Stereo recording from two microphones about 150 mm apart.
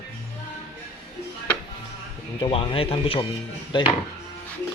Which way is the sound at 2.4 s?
35° left (ahead or behind).